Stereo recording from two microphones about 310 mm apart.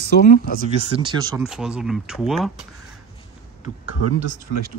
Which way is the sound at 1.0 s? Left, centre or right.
Centre.